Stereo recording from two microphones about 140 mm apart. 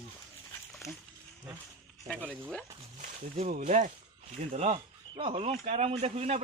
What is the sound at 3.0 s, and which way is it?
Speech, 55° right (ahead or behind).